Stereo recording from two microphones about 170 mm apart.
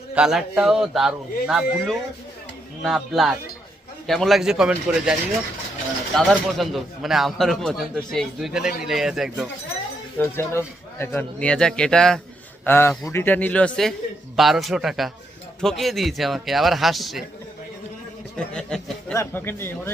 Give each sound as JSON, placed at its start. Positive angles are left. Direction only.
{"t": 0.1, "sound": "speech", "side_deg": -5}
{"t": 6.1, "sound": "speech", "side_deg": 0}
{"t": 10.2, "sound": "a man's voice", "side_deg": 15}
{"t": 18.3, "sound": "a man's voice", "side_deg": 5}